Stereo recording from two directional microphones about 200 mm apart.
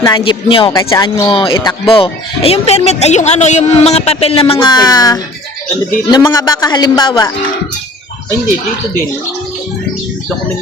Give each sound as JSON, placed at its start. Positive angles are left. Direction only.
{"t": 0.0, "sound": "a man's voice", "side_deg": 20}
{"t": 0.7, "sound": "speech", "side_deg": 15}
{"t": 1.0, "sound": "a man's voice", "side_deg": 25}